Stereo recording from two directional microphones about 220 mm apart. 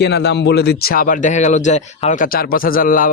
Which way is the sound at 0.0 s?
50° left (ahead or behind).